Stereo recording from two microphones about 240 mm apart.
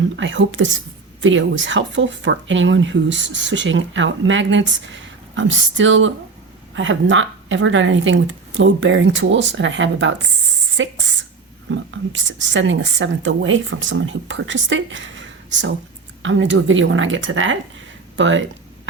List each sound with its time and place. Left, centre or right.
0.0 s speech: right